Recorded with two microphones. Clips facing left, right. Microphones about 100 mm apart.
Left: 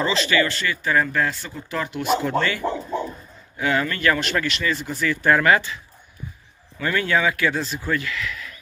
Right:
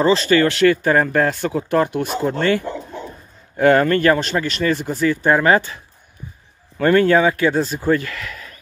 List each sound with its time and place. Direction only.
0.0 s speech: 40° right (ahead or behind)
0.5 s speech: 65° right (ahead or behind)
0.8 s speech: 45° right (ahead or behind); by 1.8 s 65° right (ahead or behind)
1.8 s speech: 45° right (ahead or behind)
6.8 s speech: 40° right (ahead or behind)